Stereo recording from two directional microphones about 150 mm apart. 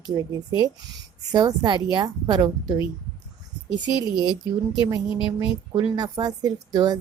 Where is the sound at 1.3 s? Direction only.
25° right (ahead or behind).